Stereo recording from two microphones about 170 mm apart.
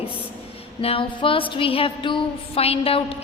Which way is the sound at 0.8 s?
35° left (ahead or behind).